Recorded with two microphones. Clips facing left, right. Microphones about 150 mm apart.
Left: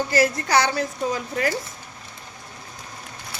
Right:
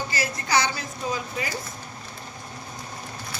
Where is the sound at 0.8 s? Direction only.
55° left (ahead or behind).